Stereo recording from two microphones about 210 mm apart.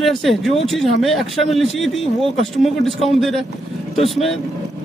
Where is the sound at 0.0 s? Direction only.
Centre (ahead or behind).